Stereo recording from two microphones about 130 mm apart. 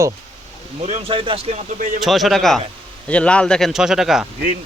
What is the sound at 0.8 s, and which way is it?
Speech, 65° right (ahead or behind).